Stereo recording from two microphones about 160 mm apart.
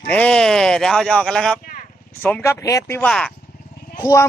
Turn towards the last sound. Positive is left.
turn(degrees=20)  # may be behind; listen again after turning